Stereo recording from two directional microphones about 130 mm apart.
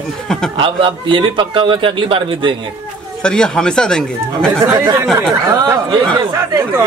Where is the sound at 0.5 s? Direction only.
40° right (ahead or behind).